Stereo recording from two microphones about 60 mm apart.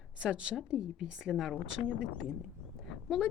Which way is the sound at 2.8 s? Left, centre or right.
Centre.